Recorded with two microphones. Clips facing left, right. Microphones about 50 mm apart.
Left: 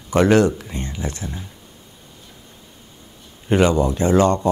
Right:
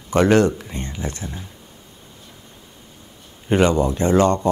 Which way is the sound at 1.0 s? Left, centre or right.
Right.